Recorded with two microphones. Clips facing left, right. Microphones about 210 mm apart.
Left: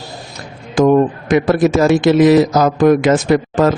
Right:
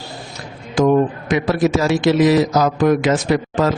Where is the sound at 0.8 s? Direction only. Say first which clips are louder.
Left 3 dB; 50° left (ahead or behind).